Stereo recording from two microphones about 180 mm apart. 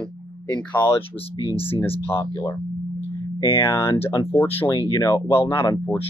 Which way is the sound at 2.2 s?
20° left (ahead or behind).